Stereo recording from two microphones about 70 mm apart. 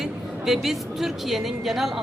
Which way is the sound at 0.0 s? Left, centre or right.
Centre.